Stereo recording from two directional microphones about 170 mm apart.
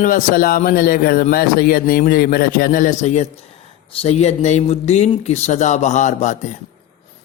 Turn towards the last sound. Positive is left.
turn(degrees=45)  # may be behind; listen again after turning